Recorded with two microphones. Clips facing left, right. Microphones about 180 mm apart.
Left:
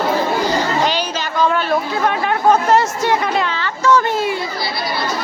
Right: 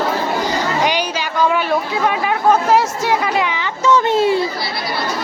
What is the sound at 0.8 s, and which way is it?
Chatter, 10° right (ahead or behind).